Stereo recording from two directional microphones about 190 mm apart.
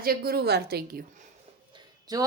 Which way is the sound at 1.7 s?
20° right (ahead or behind).